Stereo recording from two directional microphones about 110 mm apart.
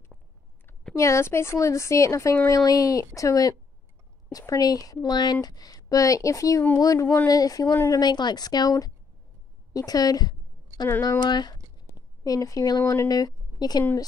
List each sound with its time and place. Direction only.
0.9 s a woman's voice: 25° left (ahead or behind)
11.8 s speech: 30° left (ahead or behind)